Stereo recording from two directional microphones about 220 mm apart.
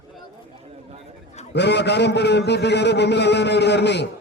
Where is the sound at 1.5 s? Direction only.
50° left (ahead or behind).